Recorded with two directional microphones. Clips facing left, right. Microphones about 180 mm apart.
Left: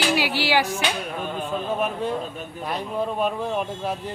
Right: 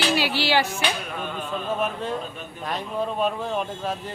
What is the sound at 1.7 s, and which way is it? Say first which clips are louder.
Speech: left 1 dB; 15° left (ahead or behind).